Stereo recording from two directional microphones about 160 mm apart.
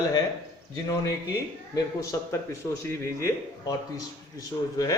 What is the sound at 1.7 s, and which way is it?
Speech, 20° left (ahead or behind).